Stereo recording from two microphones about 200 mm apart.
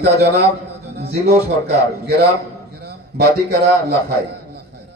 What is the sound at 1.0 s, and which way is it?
Speech, 55° right (ahead or behind).